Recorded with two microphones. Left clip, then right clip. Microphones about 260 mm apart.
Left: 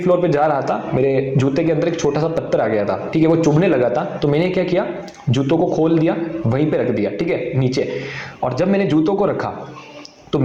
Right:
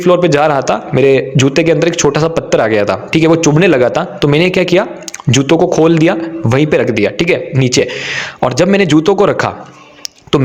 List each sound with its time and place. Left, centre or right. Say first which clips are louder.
0.0 s a man's voice: right 6 dB; right